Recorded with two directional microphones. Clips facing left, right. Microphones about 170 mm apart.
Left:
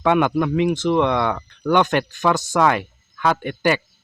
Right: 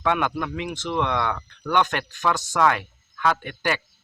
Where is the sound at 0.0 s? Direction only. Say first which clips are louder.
Left 7 dB; 15° left (ahead or behind).